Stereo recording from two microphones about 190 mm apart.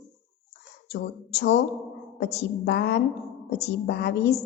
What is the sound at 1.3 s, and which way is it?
A woman's voice, 60° left (ahead or behind).